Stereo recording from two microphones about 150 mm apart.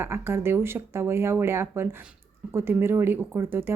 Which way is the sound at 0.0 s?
15° right (ahead or behind).